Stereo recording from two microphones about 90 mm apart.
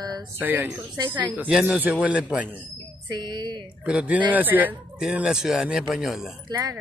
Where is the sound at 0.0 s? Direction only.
50° right (ahead or behind).